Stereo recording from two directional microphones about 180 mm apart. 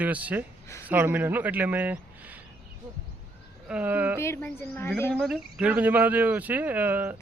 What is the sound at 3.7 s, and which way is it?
Speech, 10° right (ahead or behind).